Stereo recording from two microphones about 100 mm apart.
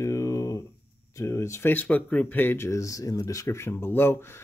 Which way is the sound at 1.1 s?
30° left (ahead or behind).